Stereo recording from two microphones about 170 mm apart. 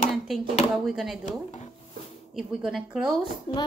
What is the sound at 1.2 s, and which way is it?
Speech, 45° left (ahead or behind).